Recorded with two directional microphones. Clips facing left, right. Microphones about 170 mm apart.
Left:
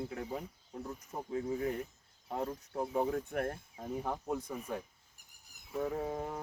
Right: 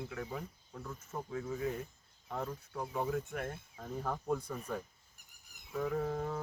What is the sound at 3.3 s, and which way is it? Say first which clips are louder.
Speech: left 5 dB; 50° left (ahead or behind).